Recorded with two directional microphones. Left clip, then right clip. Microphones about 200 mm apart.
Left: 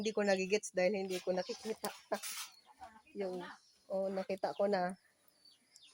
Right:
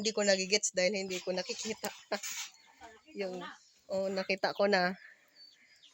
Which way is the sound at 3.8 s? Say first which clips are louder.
Right 4 dB; 10° right (ahead or behind).